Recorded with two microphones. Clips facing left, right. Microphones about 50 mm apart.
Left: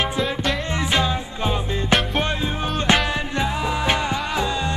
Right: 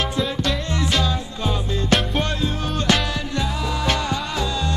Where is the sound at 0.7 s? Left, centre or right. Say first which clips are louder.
Left 1 dB; left.